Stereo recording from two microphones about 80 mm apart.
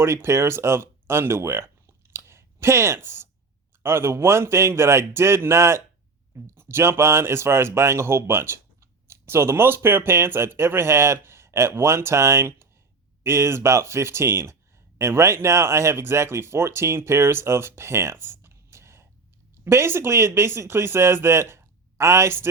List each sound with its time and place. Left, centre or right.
0.0 s speech: right